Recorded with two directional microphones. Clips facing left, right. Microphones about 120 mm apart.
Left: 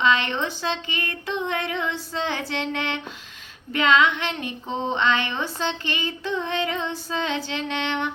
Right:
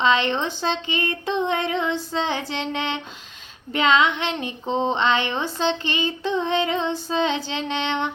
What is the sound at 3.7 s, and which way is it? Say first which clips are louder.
Female singing: right 1 dB; 25° right (ahead or behind).